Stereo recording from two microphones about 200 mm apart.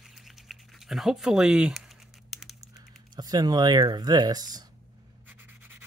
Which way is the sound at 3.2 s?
20° right (ahead or behind).